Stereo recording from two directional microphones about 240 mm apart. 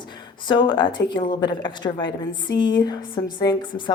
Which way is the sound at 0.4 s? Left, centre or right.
Centre.